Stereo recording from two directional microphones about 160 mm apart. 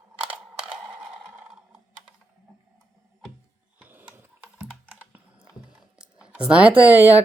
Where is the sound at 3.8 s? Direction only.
10° right (ahead or behind).